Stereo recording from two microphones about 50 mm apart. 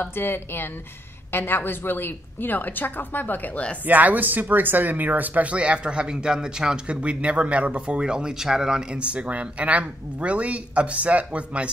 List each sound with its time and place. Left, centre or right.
0.1 s a woman's voice: left
3.8 s speech: right